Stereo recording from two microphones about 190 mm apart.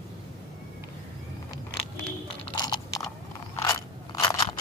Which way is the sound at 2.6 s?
20° left (ahead or behind).